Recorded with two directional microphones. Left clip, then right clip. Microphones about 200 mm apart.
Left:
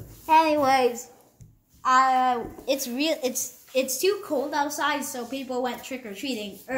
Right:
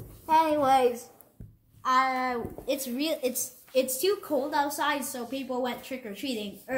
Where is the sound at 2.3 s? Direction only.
15° left (ahead or behind).